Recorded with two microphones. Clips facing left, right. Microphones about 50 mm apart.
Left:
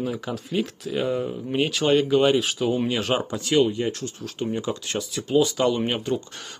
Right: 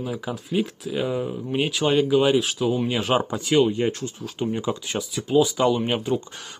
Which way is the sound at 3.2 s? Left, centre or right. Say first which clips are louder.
Right 2 dB; centre.